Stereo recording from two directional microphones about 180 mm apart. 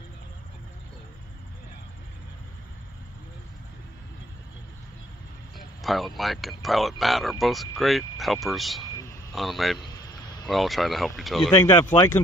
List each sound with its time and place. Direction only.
5.8 s speech: centre (ahead or behind)
11.6 s speech: 25° left (ahead or behind)